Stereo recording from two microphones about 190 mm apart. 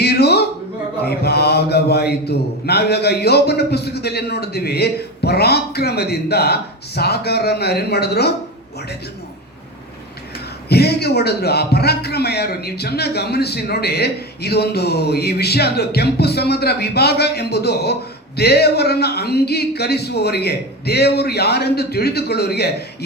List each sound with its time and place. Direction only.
0.0 s a sound: 60° left (ahead or behind)
1.0 s a man's voice: 60° left (ahead or behind)
10.7 s a man's voice: 60° left (ahead or behind)